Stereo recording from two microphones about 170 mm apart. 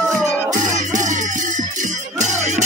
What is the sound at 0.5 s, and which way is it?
Music, 45° right (ahead or behind).